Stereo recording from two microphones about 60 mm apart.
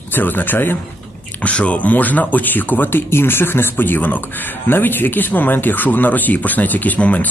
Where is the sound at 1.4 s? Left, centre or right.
Left.